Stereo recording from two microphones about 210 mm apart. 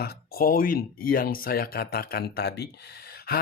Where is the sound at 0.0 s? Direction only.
45° left (ahead or behind).